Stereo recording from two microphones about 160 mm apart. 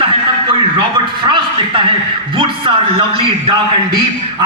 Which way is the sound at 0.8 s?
30° right (ahead or behind).